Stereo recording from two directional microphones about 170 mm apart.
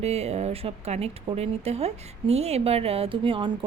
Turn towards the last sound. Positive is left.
turn(degrees=-30)  # may be behind; listen again after turning